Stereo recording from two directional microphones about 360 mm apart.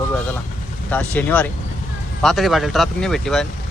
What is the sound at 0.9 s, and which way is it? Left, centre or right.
Speech, centre.